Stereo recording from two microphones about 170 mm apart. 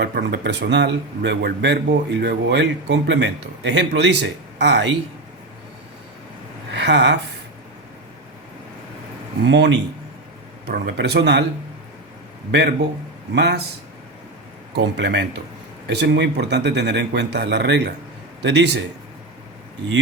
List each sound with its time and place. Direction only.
0.0 s a man's voice: 85° right
6.7 s a sound: 90° right
9.5 s a man's voice: 90° right
10.7 s speech: 75° right (ahead or behind)
12.5 s a man's voice: 85° right
14.8 s a man's voice: 90° right